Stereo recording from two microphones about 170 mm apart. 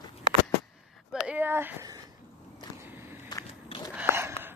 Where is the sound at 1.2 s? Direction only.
10° right (ahead or behind).